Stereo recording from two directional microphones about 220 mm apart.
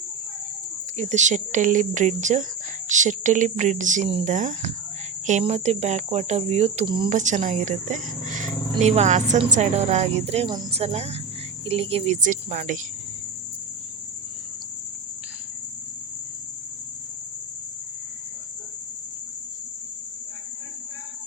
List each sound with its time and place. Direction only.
0.9 s speech: 30° right (ahead or behind)
7.1 s speech: 35° right (ahead or behind)